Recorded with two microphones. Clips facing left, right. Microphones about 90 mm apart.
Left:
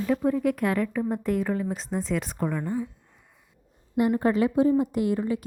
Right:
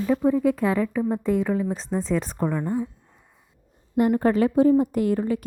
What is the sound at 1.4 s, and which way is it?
Speech, 5° right (ahead or behind).